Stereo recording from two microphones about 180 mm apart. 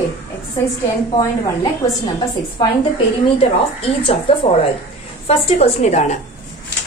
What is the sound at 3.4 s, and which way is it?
A woman's voice, 30° left (ahead or behind).